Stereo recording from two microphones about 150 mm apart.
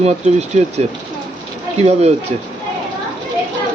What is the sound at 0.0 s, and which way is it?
Speech, 45° right (ahead or behind).